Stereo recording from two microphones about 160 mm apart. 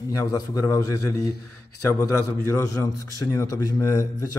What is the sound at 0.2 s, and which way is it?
A man's voice, 20° left (ahead or behind).